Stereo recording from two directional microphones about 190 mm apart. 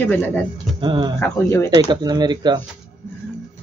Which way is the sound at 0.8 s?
25° right (ahead or behind).